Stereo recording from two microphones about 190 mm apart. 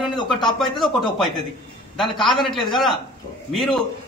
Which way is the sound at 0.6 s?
Centre (ahead or behind).